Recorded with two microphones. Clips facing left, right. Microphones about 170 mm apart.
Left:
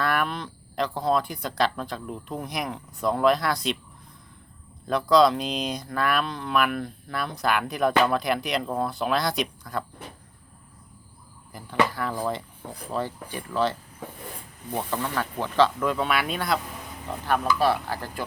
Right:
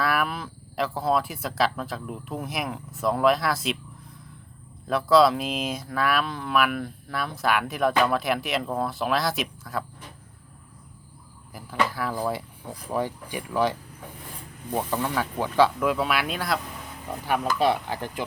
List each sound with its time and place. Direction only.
0.0 s speech: 5° right (ahead or behind)
4.9 s speech: 5° right (ahead or behind)
11.5 s speech: 5° right (ahead or behind)
17.1 s speech: 10° right (ahead or behind)